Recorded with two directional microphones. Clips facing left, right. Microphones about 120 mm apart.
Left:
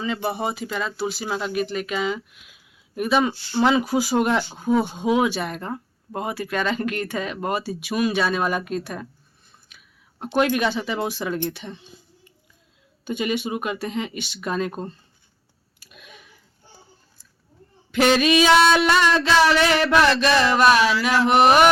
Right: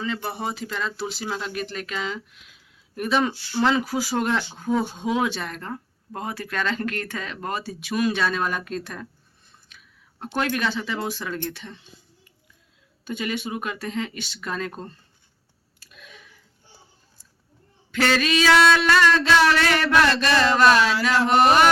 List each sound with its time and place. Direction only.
0.0 s speech: 15° left (ahead or behind)
9.6 s a sound: 10° left (ahead or behind)
10.3 s speech: 15° left (ahead or behind)
13.1 s speech: 20° left (ahead or behind)
15.8 s a sound: 15° left (ahead or behind)
17.9 s speech: 20° left (ahead or behind)